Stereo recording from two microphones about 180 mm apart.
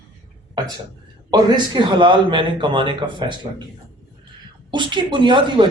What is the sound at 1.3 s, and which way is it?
Speech, 25° right (ahead or behind).